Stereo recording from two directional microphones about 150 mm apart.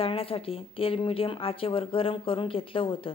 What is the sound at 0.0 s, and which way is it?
A woman's voice, 40° left (ahead or behind).